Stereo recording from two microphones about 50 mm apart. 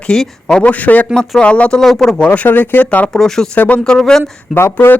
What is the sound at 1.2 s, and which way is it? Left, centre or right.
Speech, left.